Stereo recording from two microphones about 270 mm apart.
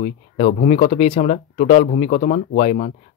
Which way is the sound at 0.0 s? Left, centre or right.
Left.